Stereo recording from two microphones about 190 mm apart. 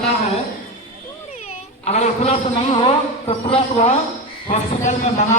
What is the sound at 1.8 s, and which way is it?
A man's voice, 35° left (ahead or behind).